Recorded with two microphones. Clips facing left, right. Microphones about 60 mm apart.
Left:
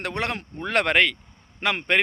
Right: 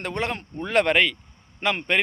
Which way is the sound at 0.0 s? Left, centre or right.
Left.